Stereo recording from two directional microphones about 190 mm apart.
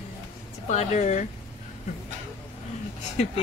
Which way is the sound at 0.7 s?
40° left (ahead or behind).